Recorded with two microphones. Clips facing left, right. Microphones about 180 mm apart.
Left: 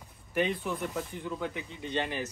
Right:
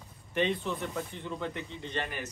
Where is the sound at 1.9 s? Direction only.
25° left (ahead or behind).